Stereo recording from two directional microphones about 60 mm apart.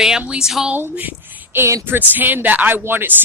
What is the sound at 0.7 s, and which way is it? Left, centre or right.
Speech, right.